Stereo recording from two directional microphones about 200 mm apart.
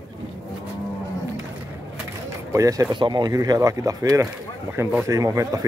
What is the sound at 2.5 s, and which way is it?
Speech, 15° right (ahead or behind).